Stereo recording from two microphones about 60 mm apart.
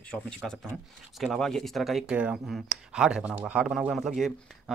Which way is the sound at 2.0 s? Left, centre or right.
Right.